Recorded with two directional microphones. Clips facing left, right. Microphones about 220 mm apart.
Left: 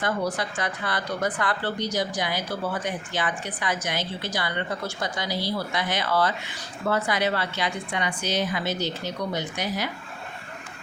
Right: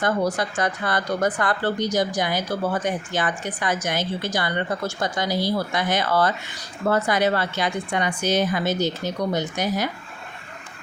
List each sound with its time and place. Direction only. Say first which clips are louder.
0.0 s a woman's voice: right 4 dB; 45° right (ahead or behind)